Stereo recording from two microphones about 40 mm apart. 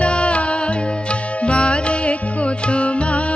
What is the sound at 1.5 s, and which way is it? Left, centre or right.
Music, left.